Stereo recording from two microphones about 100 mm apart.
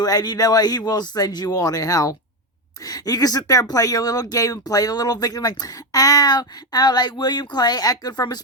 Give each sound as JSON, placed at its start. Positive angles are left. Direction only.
{"t": 0.0, "sound": "speech", "side_deg": 40}